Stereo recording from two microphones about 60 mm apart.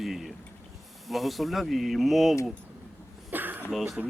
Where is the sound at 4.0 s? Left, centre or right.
Centre.